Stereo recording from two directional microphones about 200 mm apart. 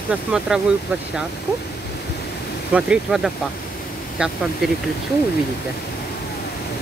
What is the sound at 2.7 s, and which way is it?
Speech, 5° right (ahead or behind).